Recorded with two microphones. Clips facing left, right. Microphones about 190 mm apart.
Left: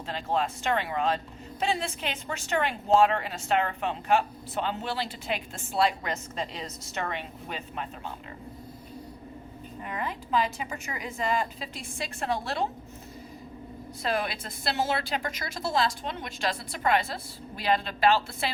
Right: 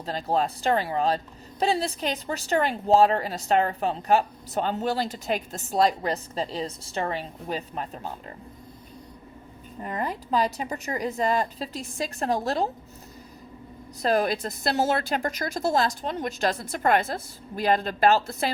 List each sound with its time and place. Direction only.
0.0 s speech: 40° right (ahead or behind)
9.8 s speech: 40° right (ahead or behind)
14.0 s a woman's voice: 40° right (ahead or behind)